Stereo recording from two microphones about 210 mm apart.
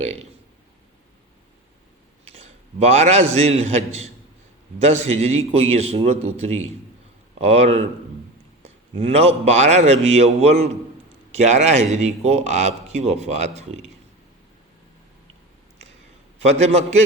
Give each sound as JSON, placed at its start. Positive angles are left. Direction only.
{"t": 0.0, "sound": "a man's voice", "side_deg": -30}
{"t": 2.2, "sound": "a man's voice", "side_deg": -30}
{"t": 16.4, "sound": "a man's voice", "side_deg": -30}